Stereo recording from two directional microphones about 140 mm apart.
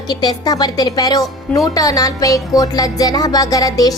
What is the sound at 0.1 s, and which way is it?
Speech, 30° left (ahead or behind).